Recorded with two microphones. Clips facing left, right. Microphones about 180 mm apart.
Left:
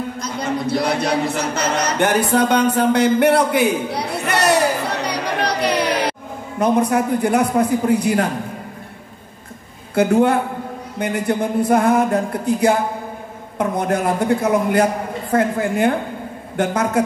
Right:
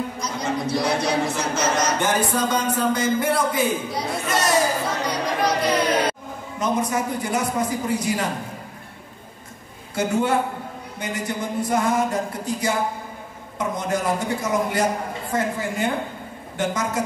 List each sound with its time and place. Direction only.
0.2 s a man's voice: 60° left (ahead or behind)
6.6 s music: 60° left (ahead or behind)
9.9 s music: 60° left (ahead or behind)